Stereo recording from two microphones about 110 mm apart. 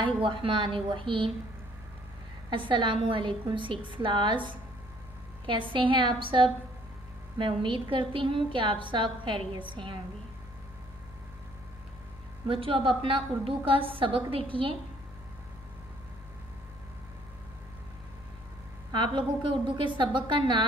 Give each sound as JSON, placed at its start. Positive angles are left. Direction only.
{"t": 0.0, "sound": "a woman's voice", "side_deg": -50}
{"t": 2.5, "sound": "a woman's voice", "side_deg": -50}
{"t": 12.4, "sound": "a woman's voice", "side_deg": -55}
{"t": 18.9, "sound": "a woman's voice", "side_deg": -45}